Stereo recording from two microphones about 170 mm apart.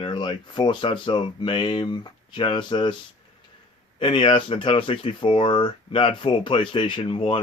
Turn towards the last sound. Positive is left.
turn(degrees=30)  # may be behind; listen again after turning